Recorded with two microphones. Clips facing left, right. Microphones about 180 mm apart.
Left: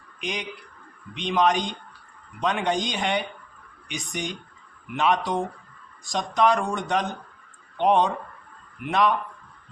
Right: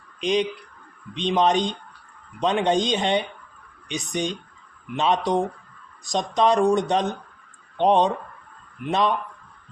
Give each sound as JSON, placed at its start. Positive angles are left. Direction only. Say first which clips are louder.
{"t": 0.2, "sound": "speech", "louder": "right 10 dB", "side_deg": -20}